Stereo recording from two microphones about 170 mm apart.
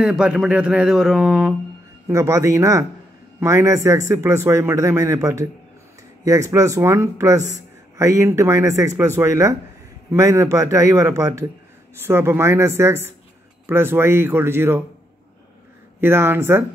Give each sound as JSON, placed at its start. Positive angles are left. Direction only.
{"t": 0.0, "sound": "speech", "side_deg": -5}
{"t": 2.0, "sound": "a man's voice", "side_deg": -15}
{"t": 16.0, "sound": "a man's voice", "side_deg": -15}